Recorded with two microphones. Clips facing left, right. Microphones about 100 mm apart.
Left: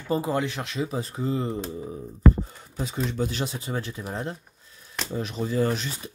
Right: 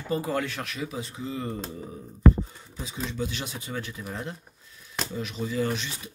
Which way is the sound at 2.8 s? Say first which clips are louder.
Left 4 dB; 55° left (ahead or behind).